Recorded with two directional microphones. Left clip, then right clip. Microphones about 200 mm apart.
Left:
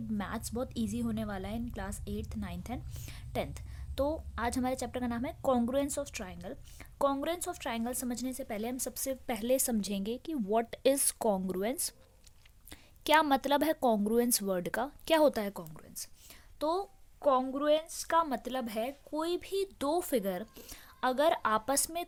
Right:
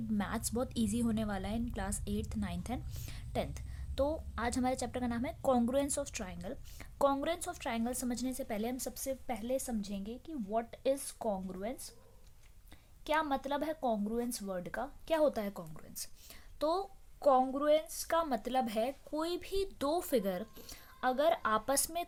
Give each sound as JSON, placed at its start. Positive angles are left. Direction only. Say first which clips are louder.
{"t": 0.2, "sound": "a woman's voice", "louder": "even", "side_deg": 10}